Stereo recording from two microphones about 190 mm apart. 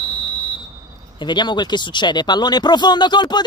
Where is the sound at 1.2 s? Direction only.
25° left (ahead or behind).